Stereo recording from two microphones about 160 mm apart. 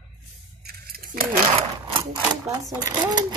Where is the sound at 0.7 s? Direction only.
65° right (ahead or behind).